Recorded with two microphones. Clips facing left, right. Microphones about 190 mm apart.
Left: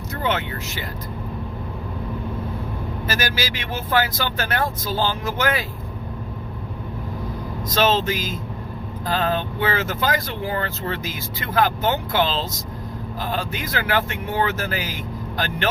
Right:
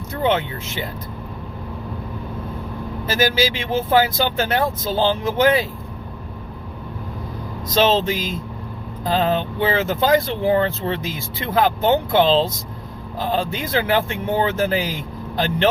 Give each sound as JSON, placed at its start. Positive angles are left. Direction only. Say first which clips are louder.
{"t": 0.1, "sound": "speech", "louder": "right 5 dB", "side_deg": -25}
{"t": 3.1, "sound": "speech", "louder": "right 8 dB", "side_deg": -25}
{"t": 7.7, "sound": "speech", "louder": "right 3 dB", "side_deg": -25}